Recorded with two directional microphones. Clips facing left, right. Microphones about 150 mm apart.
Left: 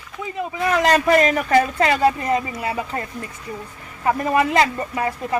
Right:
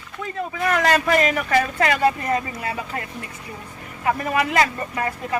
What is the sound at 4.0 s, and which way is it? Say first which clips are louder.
Speech: left 3 dB; 25° left (ahead or behind).